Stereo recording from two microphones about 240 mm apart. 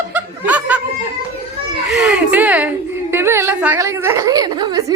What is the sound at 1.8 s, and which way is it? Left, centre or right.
A woman's voice, centre.